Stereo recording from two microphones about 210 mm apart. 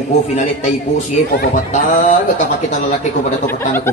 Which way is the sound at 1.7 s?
40° left (ahead or behind).